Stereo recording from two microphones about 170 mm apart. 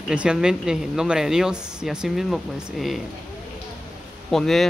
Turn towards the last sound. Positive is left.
turn(degrees=0)  # may be behind; listen again after turning